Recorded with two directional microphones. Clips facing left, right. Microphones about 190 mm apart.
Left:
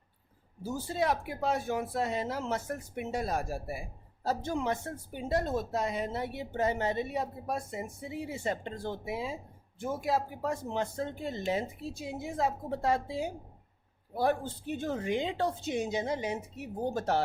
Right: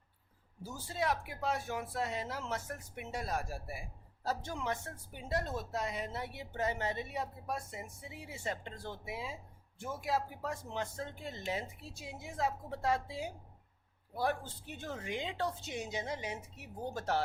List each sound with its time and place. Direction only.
0.8 s speech: 25° left (ahead or behind)